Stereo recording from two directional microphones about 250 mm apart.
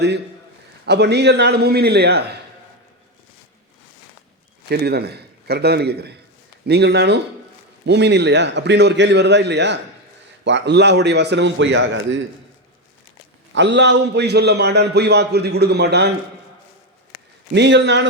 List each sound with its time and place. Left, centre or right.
0.9 s a man's voice: right
4.7 s a man's voice: right
13.5 s a man's voice: right
17.5 s a man's voice: right